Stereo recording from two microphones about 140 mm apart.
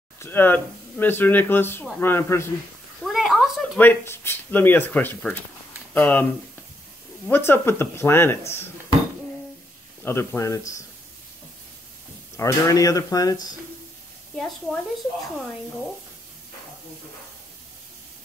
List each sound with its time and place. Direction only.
0.2 s speech: 15° left (ahead or behind)
3.0 s a sound: centre (ahead or behind)
3.7 s speech: 15° left (ahead or behind)
7.2 s speech: 15° left (ahead or behind)
10.0 s speech: 15° left (ahead or behind)
12.4 s speech: 25° left (ahead or behind)
14.3 s a woman's voice: 5° left (ahead or behind)